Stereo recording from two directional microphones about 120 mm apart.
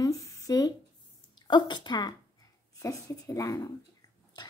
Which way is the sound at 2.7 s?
25° left (ahead or behind).